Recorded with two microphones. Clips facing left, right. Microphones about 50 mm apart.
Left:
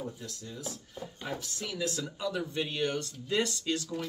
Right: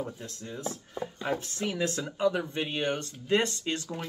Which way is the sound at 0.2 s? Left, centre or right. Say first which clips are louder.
Right 4 dB; right.